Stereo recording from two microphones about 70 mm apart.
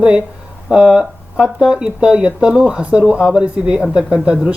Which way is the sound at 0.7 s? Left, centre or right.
Centre.